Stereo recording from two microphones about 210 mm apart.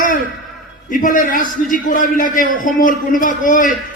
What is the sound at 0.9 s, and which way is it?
A man's voice, 40° left (ahead or behind).